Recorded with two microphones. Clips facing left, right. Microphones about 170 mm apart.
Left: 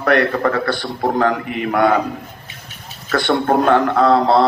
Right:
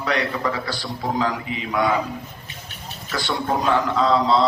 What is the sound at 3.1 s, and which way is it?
A man's voice, 60° left (ahead or behind).